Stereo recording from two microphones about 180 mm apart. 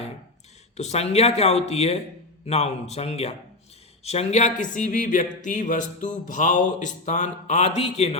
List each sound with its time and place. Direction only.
0.8 s speech: 35° left (ahead or behind)